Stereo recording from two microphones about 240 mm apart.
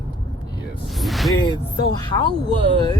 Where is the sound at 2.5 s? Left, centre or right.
Right.